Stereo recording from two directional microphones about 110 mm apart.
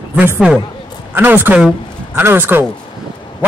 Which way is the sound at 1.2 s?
15° right (ahead or behind).